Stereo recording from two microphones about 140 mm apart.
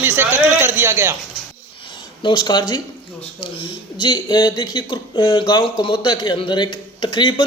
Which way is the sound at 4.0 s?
35° left (ahead or behind).